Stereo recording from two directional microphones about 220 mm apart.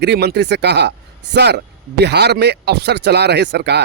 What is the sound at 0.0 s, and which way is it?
Speech, 50° right (ahead or behind).